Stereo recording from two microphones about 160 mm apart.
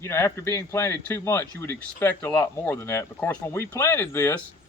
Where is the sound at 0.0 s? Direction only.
15° left (ahead or behind).